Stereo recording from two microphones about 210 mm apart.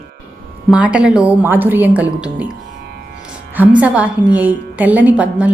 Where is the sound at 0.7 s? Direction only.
5° right (ahead or behind).